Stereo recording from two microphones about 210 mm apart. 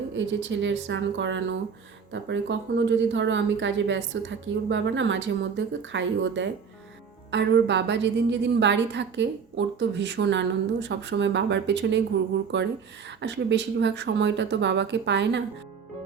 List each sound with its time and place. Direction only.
0.1 s a woman's voice: 60° right (ahead or behind)